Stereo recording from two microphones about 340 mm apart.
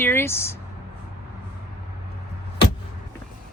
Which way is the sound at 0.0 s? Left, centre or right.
Centre.